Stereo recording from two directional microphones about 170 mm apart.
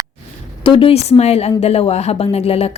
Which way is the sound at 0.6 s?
30° left (ahead or behind).